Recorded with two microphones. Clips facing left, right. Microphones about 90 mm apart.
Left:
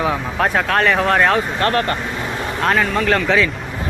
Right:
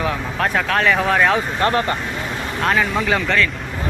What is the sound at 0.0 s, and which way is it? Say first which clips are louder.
Speech: left 3 dB; 5° left (ahead or behind).